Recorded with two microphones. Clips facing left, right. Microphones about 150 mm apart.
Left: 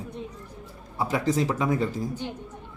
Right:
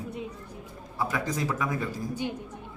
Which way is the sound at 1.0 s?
25° left (ahead or behind).